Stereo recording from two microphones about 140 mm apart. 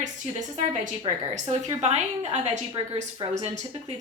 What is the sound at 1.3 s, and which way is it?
A woman's voice, 55° right (ahead or behind).